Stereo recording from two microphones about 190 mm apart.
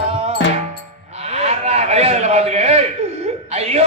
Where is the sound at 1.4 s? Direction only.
35° right (ahead or behind).